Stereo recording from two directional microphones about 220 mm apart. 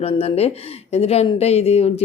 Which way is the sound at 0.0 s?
25° left (ahead or behind).